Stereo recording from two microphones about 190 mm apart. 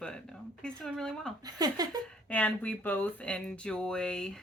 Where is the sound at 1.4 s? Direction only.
20° right (ahead or behind).